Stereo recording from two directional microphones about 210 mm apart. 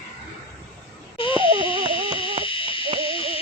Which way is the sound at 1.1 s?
25° left (ahead or behind).